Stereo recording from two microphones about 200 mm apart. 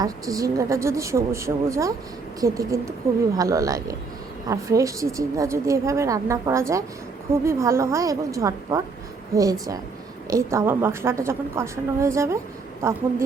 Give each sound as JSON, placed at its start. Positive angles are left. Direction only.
{"t": 0.0, "sound": "a woman's voice", "side_deg": -15}